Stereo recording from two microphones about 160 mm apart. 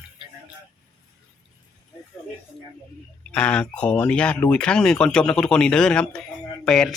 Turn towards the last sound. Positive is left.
turn(degrees=5)  # may be behind; listen again after turning